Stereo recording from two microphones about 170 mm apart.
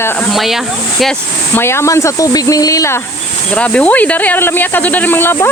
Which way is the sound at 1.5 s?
15° left (ahead or behind).